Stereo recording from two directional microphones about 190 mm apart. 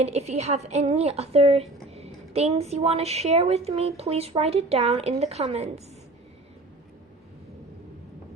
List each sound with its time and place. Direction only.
0.0 s a woman's voice: 35° right (ahead or behind)